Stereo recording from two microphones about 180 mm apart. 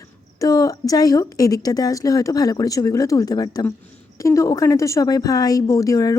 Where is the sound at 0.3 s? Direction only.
20° left (ahead or behind).